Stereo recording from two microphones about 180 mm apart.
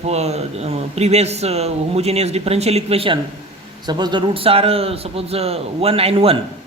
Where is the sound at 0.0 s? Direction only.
35° right (ahead or behind).